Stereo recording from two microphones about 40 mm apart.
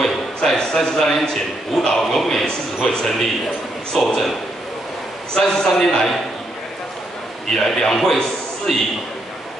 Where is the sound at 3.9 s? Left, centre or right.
Centre.